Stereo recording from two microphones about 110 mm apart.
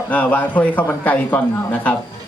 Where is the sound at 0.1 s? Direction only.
15° left (ahead or behind).